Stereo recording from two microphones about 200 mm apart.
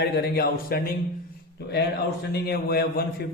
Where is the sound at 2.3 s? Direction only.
50° left (ahead or behind).